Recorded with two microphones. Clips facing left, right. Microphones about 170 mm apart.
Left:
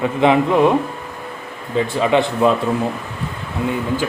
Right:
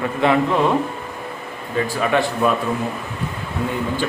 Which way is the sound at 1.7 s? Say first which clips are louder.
Left 3 dB; 20° left (ahead or behind).